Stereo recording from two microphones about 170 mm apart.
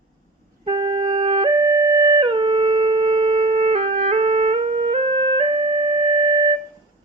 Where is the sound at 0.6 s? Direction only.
25° right (ahead or behind).